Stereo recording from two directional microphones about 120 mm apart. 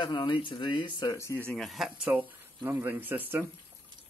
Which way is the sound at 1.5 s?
Centre (ahead or behind).